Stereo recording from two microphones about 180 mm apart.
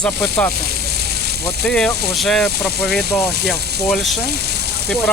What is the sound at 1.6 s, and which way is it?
Speech, 5° left (ahead or behind).